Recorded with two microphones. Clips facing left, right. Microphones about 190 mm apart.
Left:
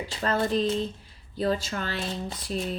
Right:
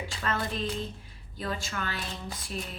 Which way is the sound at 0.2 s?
35° left (ahead or behind).